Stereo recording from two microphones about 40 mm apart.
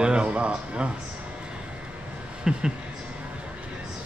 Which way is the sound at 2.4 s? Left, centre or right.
Centre.